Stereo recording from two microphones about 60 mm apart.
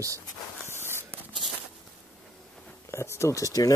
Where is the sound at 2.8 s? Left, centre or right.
Left.